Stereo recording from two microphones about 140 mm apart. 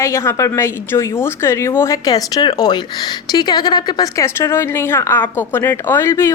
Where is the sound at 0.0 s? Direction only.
20° left (ahead or behind).